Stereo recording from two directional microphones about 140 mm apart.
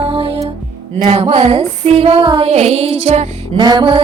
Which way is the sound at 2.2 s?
35° right (ahead or behind).